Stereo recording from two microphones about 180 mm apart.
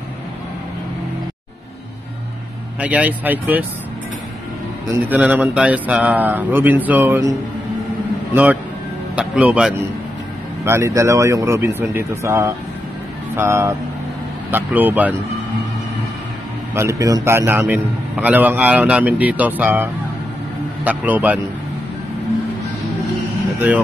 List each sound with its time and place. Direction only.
2.8 s a man's voice: 5° right (ahead or behind)
5.1 s a man's voice: 10° right (ahead or behind)
9.1 s a man's voice: 5° right (ahead or behind)
16.7 s a man's voice: 15° right (ahead or behind)